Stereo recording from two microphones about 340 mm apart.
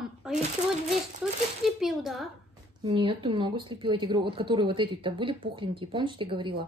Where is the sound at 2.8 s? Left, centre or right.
Centre.